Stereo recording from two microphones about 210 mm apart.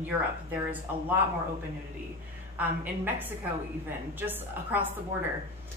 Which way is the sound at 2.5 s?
10° right (ahead or behind).